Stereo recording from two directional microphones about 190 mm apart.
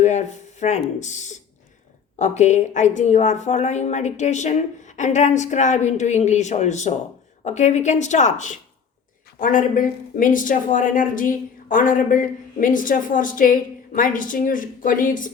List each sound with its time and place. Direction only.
0.0 s a woman's voice: 40° left (ahead or behind)